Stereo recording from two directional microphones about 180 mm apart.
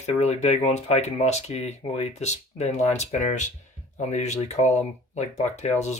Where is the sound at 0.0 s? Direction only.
40° left (ahead or behind).